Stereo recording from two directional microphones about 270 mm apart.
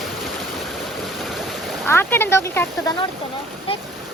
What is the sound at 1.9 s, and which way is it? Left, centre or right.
A child's voice, centre.